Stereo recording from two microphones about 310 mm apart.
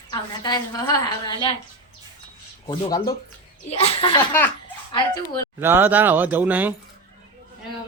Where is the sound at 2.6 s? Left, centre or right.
Centre.